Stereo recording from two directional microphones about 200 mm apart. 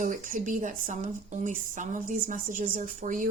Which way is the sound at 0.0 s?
40° right (ahead or behind).